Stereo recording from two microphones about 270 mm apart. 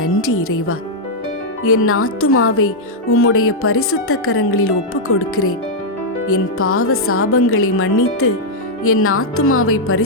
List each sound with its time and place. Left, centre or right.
0.0 s a woman's voice: left